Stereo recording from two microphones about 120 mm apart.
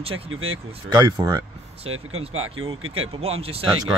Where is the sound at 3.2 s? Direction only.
55° right (ahead or behind).